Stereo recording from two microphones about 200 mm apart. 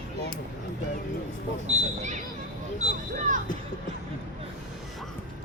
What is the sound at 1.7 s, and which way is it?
Speech, 35° right (ahead or behind).